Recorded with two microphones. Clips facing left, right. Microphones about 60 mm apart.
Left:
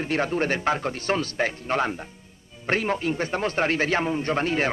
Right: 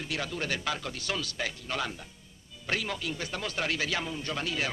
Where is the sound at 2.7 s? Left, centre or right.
Left.